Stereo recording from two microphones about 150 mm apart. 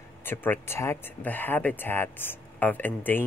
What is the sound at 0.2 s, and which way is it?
Speech, 15° left (ahead or behind).